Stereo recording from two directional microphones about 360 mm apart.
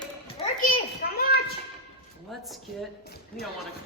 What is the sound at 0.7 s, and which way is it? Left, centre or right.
Speech, left.